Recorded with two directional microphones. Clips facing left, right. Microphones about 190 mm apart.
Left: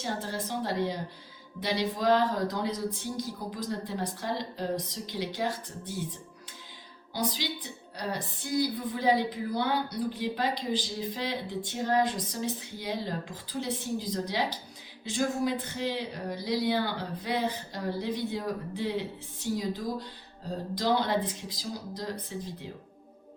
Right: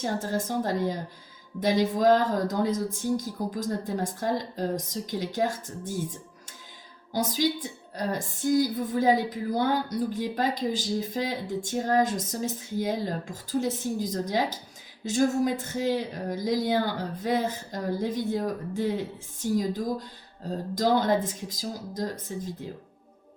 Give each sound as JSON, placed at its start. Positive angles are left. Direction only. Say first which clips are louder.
{"t": 0.0, "sound": "a woman's voice", "louder": "right 5 dB", "side_deg": -45}
{"t": 7.1, "sound": "a woman's voice", "louder": "right 6 dB", "side_deg": -45}